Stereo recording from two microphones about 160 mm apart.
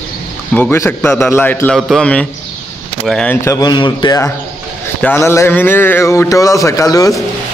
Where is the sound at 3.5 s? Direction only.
25° left (ahead or behind).